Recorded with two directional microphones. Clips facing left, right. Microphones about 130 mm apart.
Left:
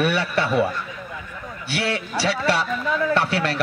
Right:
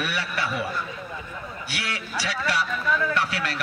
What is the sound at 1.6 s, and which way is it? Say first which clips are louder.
A man's voice: left 10 dB; 30° left (ahead or behind).